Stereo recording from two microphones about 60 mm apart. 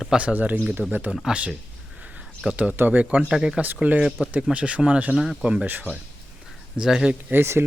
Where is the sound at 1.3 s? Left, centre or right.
Centre.